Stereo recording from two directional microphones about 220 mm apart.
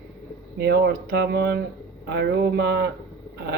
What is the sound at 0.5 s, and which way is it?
Speech, 50° right (ahead or behind).